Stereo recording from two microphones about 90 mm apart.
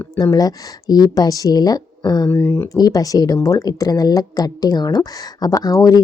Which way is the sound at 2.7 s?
40° left (ahead or behind).